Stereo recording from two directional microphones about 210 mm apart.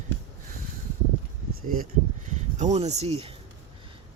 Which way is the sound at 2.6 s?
30° right (ahead or behind).